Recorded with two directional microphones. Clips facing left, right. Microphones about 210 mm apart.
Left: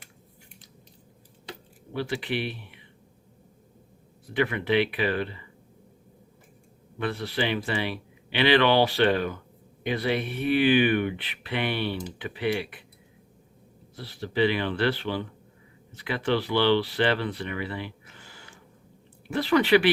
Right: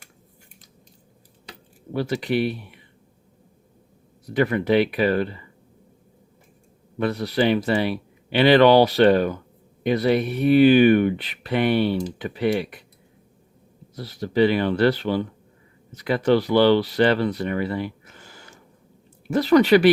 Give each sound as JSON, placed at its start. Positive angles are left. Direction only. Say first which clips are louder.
{"t": 1.9, "sound": "speech", "louder": "right 6 dB", "side_deg": -40}
{"t": 4.3, "sound": "speech", "louder": "right 5 dB", "side_deg": -40}
{"t": 7.0, "sound": "speech", "louder": "right 7 dB", "side_deg": -40}
{"t": 13.9, "sound": "speech", "louder": "right 6 dB", "side_deg": -40}